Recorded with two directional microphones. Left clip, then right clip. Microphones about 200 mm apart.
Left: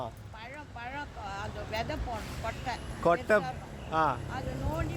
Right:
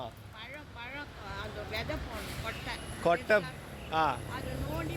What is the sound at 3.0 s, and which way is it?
Speech, 25° left (ahead or behind).